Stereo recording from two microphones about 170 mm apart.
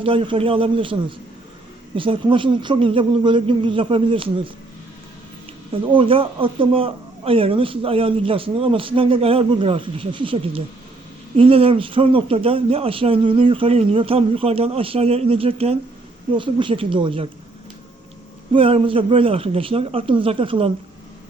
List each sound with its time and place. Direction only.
0.0 s speech: 30° right (ahead or behind)
2.0 s speech: 30° right (ahead or behind)
5.8 s speech: 30° right (ahead or behind)
18.5 s speech: 30° right (ahead or behind)